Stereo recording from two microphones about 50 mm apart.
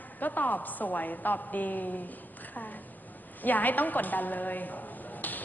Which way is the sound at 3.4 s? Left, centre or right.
Left.